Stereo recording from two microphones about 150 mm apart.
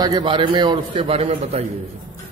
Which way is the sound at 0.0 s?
30° right (ahead or behind).